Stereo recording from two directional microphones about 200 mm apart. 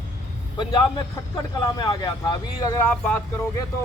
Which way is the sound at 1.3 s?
20° left (ahead or behind).